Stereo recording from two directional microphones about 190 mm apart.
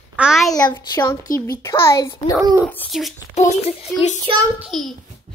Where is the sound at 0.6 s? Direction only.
20° left (ahead or behind); by 3.1 s 5° left (ahead or behind).